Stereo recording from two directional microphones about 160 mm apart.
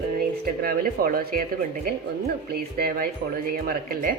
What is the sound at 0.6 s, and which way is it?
A woman's voice, 65° right (ahead or behind).